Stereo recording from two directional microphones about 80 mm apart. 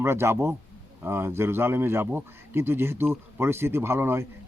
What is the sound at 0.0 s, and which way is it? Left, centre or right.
A man's voice, right.